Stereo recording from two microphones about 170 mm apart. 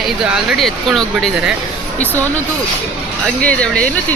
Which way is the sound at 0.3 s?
Centre (ahead or behind).